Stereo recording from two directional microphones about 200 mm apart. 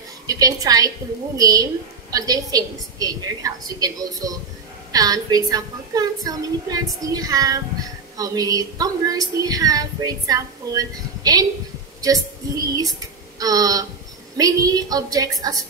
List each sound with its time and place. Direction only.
0.3 s a woman's voice: 20° right (ahead or behind)